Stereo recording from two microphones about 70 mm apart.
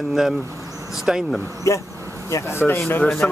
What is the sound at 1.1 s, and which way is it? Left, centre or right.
Speech, centre.